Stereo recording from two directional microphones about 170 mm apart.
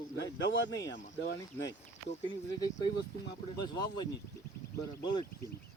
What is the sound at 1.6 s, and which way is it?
Speech, 15° left (ahead or behind).